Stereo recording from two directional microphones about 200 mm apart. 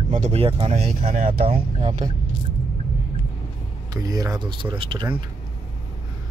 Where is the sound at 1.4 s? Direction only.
25° right (ahead or behind).